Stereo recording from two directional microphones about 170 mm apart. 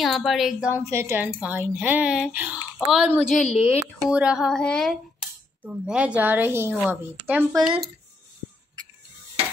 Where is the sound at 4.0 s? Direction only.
5° right (ahead or behind).